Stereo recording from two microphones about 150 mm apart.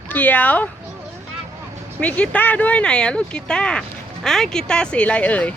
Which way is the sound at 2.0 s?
10° left (ahead or behind).